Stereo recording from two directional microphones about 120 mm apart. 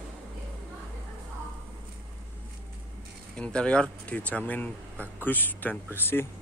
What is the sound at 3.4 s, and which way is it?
Speech, 10° left (ahead or behind).